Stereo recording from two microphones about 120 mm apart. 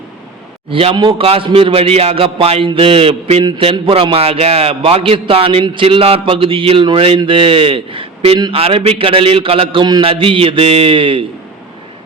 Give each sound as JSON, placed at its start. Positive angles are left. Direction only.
{"t": 0.7, "sound": "a man's voice", "side_deg": -50}